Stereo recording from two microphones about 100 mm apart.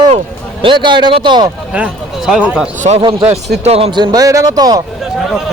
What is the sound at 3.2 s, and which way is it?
Speech, 90° right.